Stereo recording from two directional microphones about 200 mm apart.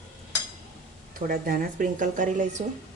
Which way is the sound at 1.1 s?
45° right (ahead or behind).